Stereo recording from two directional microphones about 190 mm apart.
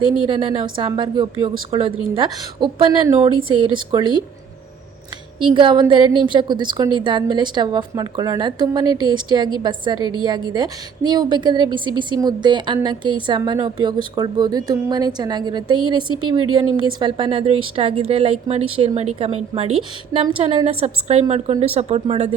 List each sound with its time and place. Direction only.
0.3 s a woman's voice: 25° right (ahead or behind)
5.4 s a woman's voice: 25° right (ahead or behind)